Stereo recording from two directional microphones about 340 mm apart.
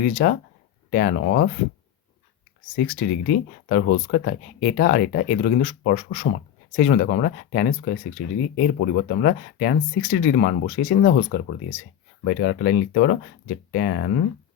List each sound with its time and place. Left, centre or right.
0.0 s speech: left
2.7 s speech: left